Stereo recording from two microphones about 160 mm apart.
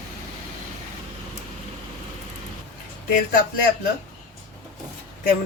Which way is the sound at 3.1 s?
55° left (ahead or behind).